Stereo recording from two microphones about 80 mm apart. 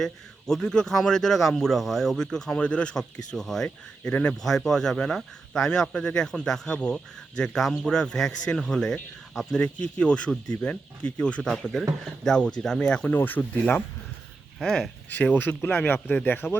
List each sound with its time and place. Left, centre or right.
0.0 s a man's voice: centre
9.6 s speech: centre
13.1 s speech: left
14.6 s a man's voice: centre
15.2 s speech: left